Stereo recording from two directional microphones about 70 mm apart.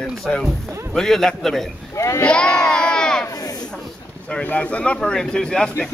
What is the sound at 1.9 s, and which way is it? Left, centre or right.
Speech, left.